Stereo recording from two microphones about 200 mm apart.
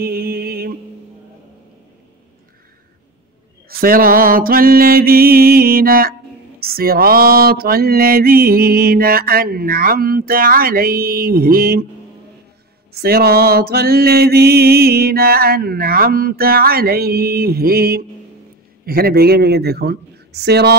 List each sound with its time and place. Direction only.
0.0 s music: 50° right (ahead or behind)
3.6 s mantra: 45° right (ahead or behind)
13.0 s mantra: 50° right (ahead or behind)